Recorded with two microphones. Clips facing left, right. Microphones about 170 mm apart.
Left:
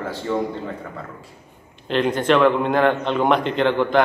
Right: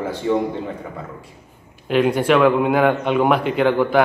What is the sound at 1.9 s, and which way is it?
A man's voice, 10° right (ahead or behind).